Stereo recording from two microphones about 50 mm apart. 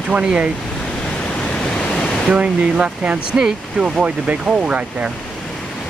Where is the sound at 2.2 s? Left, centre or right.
Right.